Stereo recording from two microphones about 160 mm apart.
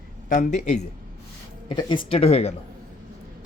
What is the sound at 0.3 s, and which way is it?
Speech, 50° left (ahead or behind).